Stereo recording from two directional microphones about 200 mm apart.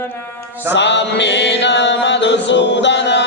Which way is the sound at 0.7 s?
60° left (ahead or behind).